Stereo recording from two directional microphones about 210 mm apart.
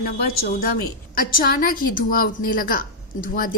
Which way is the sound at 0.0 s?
45° left (ahead or behind).